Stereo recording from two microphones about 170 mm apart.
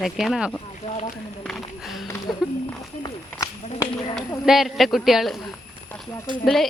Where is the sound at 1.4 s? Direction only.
Centre (ahead or behind).